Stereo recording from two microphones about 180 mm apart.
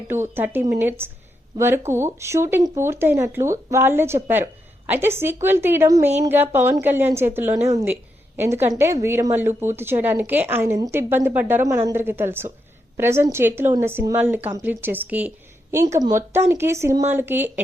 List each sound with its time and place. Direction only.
0.1 s a woman's voice: 10° right (ahead or behind)